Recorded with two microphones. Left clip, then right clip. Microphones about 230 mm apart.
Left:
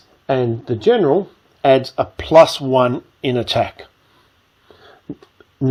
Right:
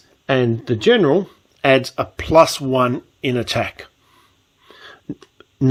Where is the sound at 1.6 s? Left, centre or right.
Right.